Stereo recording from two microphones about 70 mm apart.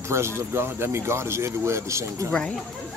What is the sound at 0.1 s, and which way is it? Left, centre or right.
Speech, right.